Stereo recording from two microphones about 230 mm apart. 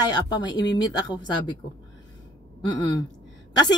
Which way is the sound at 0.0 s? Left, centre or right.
Centre.